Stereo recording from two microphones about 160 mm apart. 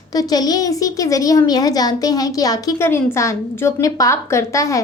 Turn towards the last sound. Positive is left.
turn(degrees=20)  # may be behind; listen again after turning